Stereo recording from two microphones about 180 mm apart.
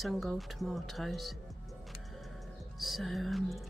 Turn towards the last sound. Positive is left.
turn(degrees=0)  # may be behind; listen again after turning